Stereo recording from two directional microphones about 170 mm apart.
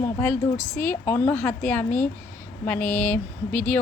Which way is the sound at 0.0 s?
10° left (ahead or behind).